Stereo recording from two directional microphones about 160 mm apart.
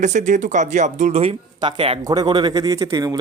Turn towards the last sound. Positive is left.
turn(degrees=-20)  # may be behind; listen again after turning